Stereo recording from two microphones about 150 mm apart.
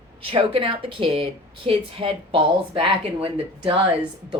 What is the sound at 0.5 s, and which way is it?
Speech, 40° right (ahead or behind).